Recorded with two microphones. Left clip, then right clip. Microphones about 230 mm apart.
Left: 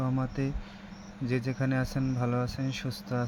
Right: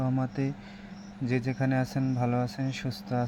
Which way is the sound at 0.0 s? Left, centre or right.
Centre.